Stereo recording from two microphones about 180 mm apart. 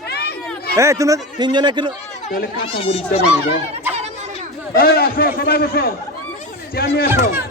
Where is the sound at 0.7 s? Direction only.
15° right (ahead or behind).